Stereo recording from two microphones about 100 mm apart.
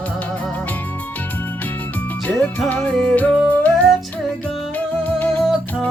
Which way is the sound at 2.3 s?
15° left (ahead or behind).